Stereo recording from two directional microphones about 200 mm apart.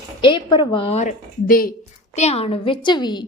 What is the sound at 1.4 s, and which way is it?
Speech, 45° left (ahead or behind).